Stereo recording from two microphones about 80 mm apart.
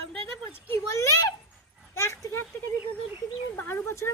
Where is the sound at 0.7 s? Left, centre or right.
Left.